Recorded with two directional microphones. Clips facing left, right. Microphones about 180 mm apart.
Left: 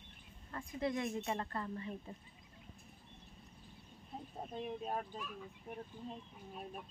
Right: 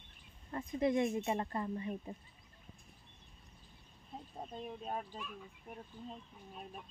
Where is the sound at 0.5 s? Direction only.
20° right (ahead or behind).